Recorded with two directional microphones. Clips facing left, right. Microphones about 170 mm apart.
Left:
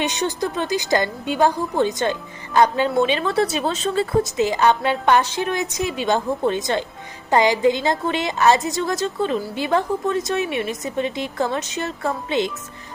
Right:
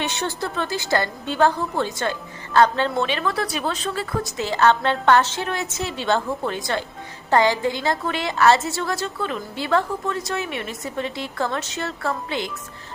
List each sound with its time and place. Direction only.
0.0 s a woman's voice: 15° left (ahead or behind)